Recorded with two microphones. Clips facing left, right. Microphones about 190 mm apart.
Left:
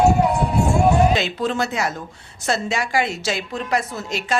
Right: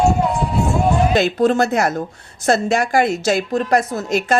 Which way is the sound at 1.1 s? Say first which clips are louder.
Right 6 dB; 50° right (ahead or behind).